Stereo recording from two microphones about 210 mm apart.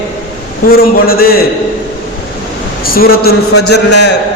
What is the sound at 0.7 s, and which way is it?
Speech, 45° left (ahead or behind).